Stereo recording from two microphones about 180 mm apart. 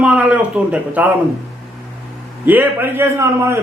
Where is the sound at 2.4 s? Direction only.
10° right (ahead or behind).